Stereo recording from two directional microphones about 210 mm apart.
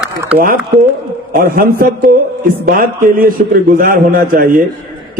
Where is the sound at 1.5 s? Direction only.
45° right (ahead or behind).